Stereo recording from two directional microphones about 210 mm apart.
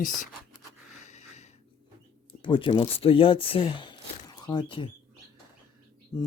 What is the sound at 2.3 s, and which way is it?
Speech, 25° left (ahead or behind).